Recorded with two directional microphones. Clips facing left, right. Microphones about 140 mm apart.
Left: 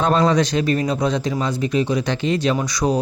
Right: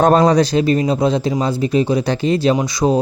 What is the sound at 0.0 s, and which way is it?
Speech, 45° right (ahead or behind).